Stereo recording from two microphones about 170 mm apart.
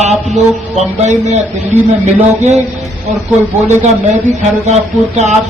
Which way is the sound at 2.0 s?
45° right (ahead or behind).